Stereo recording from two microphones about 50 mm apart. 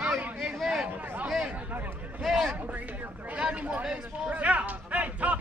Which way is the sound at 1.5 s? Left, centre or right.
Right.